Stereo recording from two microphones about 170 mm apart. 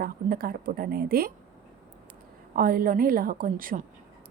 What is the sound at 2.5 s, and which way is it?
A woman's voice, 55° right (ahead or behind).